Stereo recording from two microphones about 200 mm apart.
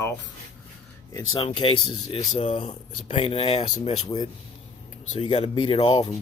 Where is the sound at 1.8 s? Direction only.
90° left.